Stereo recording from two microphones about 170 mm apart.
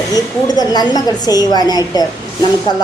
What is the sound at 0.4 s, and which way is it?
A woman's voice, 25° left (ahead or behind).